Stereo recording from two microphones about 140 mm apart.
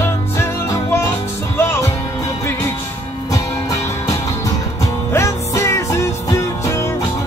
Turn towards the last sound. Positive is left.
turn(degrees=20)  # may be behind; listen again after turning